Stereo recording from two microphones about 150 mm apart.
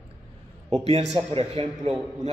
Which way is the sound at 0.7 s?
45° right (ahead or behind).